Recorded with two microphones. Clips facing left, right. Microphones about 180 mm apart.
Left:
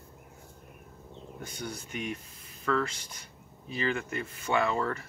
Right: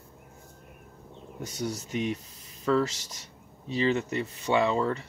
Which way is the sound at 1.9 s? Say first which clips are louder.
Right 6 dB; 30° right (ahead or behind).